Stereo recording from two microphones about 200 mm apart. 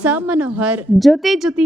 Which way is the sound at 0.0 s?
10° right (ahead or behind).